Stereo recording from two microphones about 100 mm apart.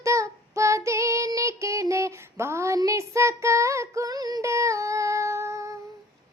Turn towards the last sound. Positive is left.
turn(degrees=-30)  # may be behind; listen again after turning